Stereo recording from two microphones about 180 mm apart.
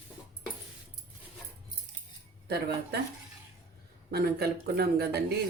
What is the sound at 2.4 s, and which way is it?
Speech, 60° right (ahead or behind).